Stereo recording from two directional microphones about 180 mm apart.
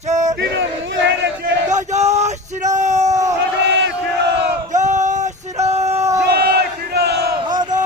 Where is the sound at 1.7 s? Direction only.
40° right (ahead or behind).